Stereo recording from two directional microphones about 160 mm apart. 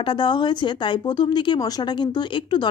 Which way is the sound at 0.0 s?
30° left (ahead or behind).